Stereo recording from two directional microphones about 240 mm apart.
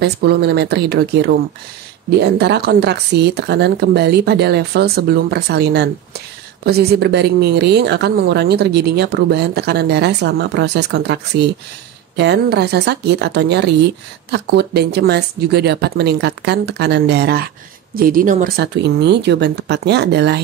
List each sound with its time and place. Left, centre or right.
0.0 s speech: right